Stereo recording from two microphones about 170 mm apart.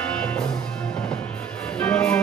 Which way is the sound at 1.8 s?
10° left (ahead or behind).